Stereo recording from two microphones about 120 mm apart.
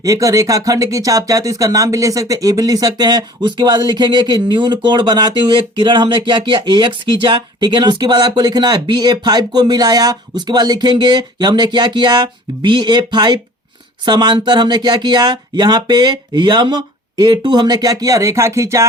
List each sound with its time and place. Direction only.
0.0 s speech: 30° right (ahead or behind)